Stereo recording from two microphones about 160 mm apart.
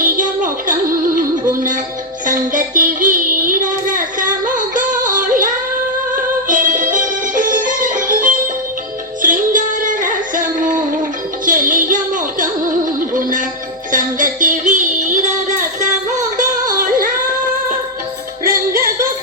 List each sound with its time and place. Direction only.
0.0 s music: 55° right (ahead or behind)
16.4 s music: 60° right (ahead or behind)